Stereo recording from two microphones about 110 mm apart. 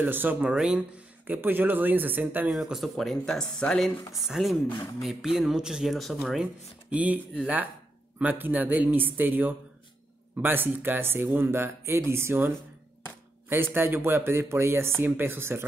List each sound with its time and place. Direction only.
0.0 s speech: 15° right (ahead or behind)
2.5 s speech: centre (ahead or behind)
4.6 s speech: 35° left (ahead or behind)
5.0 s speech: centre (ahead or behind)
6.9 s speech: 10° right (ahead or behind)